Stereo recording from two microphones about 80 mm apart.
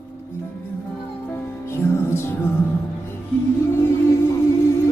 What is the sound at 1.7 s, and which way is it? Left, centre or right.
Music, left.